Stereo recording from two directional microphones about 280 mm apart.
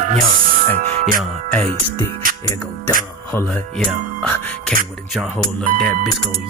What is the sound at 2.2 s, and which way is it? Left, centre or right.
Music, right.